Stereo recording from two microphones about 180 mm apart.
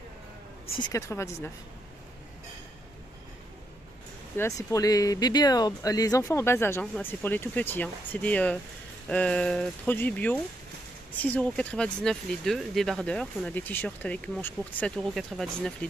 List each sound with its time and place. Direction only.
0.7 s speech: 15° left (ahead or behind)
4.4 s speech: 15° left (ahead or behind)